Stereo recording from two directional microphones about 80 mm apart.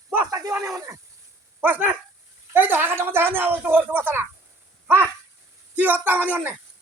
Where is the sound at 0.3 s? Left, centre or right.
Right.